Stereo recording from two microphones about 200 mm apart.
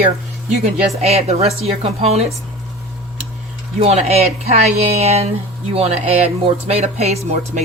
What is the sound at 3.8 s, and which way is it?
Speech, 30° right (ahead or behind).